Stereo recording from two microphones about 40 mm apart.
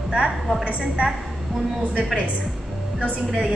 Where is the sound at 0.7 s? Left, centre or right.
Right.